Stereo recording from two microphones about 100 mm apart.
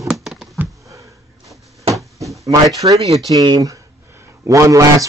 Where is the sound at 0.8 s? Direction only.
35° right (ahead or behind).